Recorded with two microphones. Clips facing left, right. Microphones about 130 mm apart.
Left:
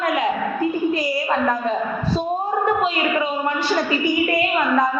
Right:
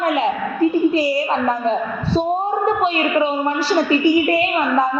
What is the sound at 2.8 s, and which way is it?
A woman's voice, 30° right (ahead or behind).